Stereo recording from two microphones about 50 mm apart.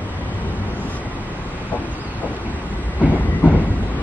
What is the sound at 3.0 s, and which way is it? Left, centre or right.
Train, right.